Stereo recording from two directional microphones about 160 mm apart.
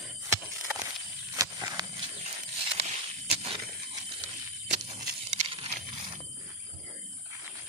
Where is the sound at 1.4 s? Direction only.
20° right (ahead or behind).